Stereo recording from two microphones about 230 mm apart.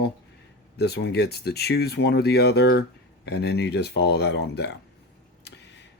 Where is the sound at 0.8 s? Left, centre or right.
Left.